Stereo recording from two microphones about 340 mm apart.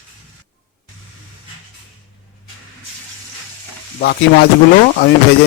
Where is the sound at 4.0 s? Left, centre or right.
Left.